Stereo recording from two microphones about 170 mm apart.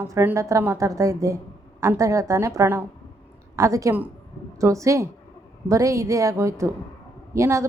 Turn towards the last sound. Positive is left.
turn(degrees=-15)  # may be behind; listen again after turning